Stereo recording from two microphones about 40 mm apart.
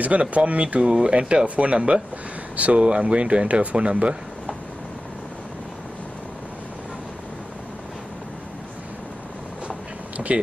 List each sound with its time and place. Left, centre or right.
0.0 s speech: right
0.8 s speech: centre
1.1 s speech: right
9.7 s vehicle: right